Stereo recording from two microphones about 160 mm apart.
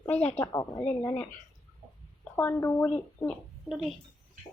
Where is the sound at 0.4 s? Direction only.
20° left (ahead or behind).